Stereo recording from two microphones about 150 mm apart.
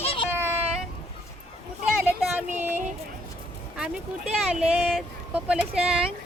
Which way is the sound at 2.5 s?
10° right (ahead or behind).